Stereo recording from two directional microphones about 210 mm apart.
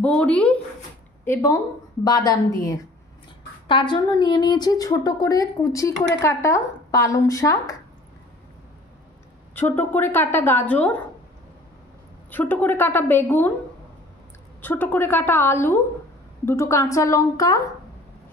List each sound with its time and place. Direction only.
0.0 s a woman's voice: 5° left (ahead or behind)
9.6 s a woman's voice: 10° left (ahead or behind)
12.3 s a woman's voice: 10° left (ahead or behind)
14.6 s a woman's voice: 10° left (ahead or behind)